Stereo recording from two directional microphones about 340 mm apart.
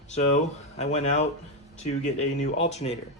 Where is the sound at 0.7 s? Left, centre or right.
Centre.